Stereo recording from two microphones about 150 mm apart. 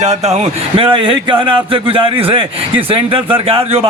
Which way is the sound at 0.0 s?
50° right (ahead or behind).